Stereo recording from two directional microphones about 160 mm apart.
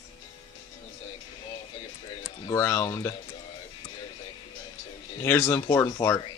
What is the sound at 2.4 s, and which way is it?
Speech, 15° left (ahead or behind).